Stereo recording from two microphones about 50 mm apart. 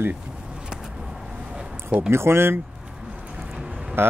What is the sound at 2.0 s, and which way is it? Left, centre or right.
Speech, right.